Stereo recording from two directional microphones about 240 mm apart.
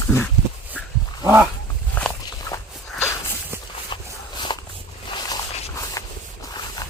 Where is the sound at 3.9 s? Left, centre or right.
Centre.